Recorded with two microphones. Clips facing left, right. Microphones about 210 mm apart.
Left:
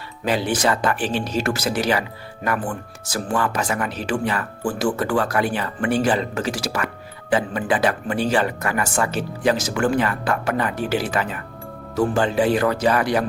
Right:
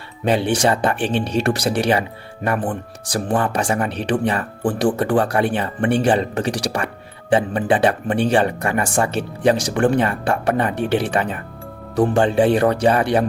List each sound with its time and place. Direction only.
0.3 s speech: 30° right (ahead or behind)